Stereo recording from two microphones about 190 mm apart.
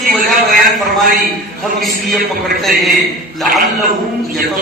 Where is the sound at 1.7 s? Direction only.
Centre (ahead or behind).